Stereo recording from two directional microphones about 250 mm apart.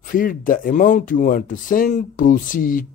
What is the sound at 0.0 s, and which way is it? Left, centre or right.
Speech, left.